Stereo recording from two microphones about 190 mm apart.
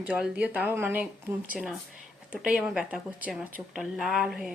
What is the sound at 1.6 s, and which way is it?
Speech, centre (ahead or behind).